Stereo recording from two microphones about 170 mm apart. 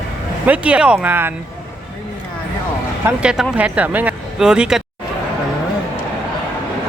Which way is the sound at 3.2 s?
5° right (ahead or behind).